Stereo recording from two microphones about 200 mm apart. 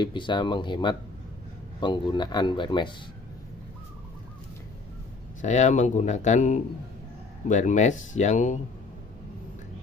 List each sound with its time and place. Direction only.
0.0 s speech: 25° left (ahead or behind)
5.4 s speech: 35° left (ahead or behind)